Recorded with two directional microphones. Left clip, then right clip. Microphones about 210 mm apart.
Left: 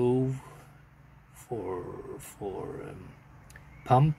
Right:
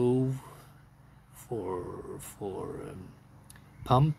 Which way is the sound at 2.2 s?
10° right (ahead or behind).